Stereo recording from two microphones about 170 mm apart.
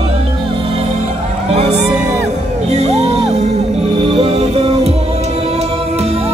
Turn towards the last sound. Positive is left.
turn(degrees=-35)  # may be behind; listen again after turning